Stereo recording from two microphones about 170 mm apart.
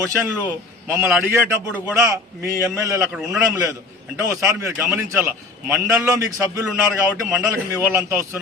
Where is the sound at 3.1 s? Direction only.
Centre (ahead or behind).